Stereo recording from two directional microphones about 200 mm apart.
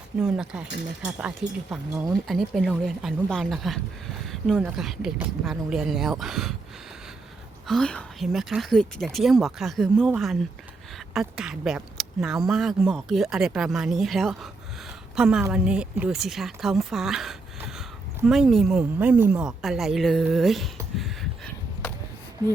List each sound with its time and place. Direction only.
0.2 s speech: 5° right (ahead or behind)
4.3 s a sound: centre (ahead or behind)
4.6 s speech: 5° right (ahead or behind)
7.7 s speech: 5° left (ahead or behind)
11.1 s a woman's voice: 5° right (ahead or behind)
21.0 s a sound: 5° left (ahead or behind)